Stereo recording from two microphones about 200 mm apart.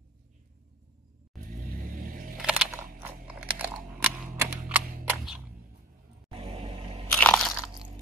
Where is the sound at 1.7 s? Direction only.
45° right (ahead or behind).